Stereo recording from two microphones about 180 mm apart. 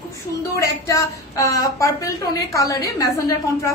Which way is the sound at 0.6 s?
20° left (ahead or behind).